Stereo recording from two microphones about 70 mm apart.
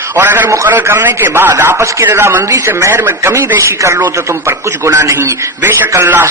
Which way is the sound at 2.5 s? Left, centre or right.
Right.